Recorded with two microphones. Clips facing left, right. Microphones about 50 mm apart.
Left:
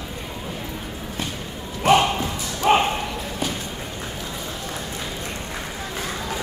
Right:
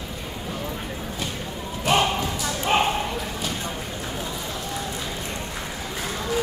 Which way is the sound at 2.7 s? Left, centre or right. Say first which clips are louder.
Left 5 dB; left.